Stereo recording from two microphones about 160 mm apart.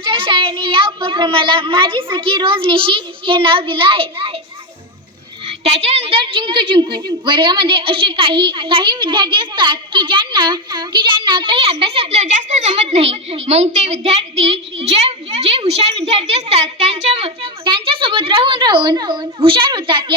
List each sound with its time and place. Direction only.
0.0 s a woman's voice: 30° right (ahead or behind)
5.5 s a woman's voice: 40° right (ahead or behind)